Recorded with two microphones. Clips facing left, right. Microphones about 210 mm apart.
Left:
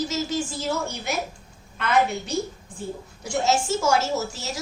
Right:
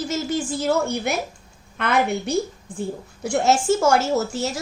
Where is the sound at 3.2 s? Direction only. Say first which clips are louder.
Right 4 dB; 55° right (ahead or behind).